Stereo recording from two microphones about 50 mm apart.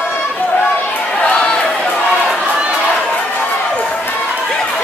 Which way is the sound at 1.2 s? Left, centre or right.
Left.